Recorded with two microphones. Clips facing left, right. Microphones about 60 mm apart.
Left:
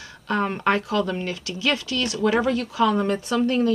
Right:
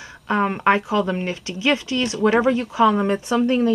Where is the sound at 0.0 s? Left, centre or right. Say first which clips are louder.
Right 3 dB; centre.